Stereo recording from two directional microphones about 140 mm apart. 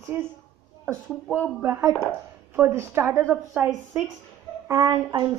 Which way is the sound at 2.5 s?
20° right (ahead or behind).